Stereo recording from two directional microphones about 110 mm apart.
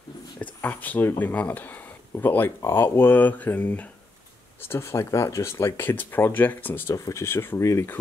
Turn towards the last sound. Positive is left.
turn(degrees=25)  # may be behind; listen again after turning